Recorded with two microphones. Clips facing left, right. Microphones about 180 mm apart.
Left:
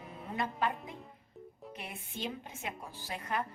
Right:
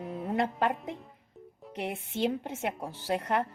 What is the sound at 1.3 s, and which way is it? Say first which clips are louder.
Music: even; centre (ahead or behind).